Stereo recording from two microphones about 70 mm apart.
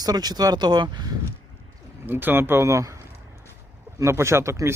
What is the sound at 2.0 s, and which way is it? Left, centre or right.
Speech, right.